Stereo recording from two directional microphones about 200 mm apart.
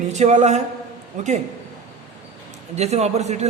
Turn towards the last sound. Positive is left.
turn(degrees=-35)  # may be behind; listen again after turning